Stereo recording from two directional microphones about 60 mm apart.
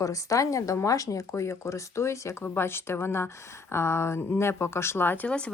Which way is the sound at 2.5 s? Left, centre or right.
Left.